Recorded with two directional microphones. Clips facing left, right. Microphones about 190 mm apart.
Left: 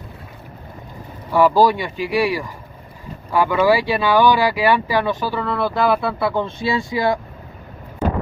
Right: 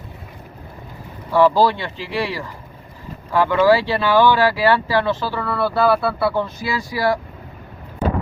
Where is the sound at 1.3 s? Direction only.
15° left (ahead or behind).